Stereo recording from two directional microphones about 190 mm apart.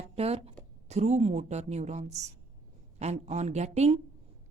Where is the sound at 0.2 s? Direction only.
30° right (ahead or behind).